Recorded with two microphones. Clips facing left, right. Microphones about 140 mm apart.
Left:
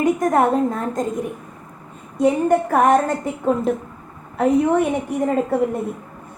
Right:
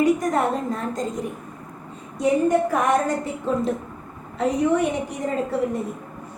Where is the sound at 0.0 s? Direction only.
55° left (ahead or behind).